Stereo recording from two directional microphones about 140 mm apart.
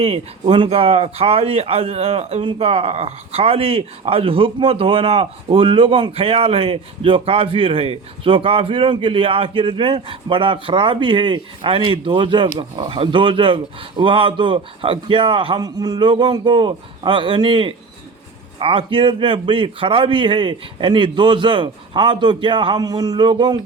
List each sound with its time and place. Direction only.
0.0 s speech: 40° right (ahead or behind)